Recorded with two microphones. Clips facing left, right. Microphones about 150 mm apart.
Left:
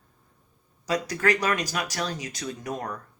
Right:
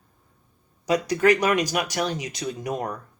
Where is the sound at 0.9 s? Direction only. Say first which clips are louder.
Right 5 dB; 20° right (ahead or behind).